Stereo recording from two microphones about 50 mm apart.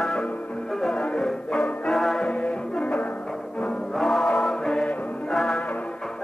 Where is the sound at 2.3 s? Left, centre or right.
Left.